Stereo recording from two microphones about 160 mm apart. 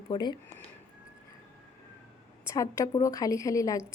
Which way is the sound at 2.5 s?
20° left (ahead or behind).